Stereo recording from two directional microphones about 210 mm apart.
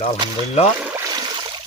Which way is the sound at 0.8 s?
10° right (ahead or behind).